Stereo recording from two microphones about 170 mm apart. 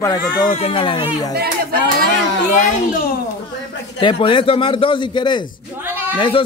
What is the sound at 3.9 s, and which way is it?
A man's voice, 30° left (ahead or behind).